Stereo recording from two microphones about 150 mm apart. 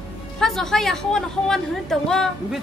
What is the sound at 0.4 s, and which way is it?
A woman's voice, 5° left (ahead or behind).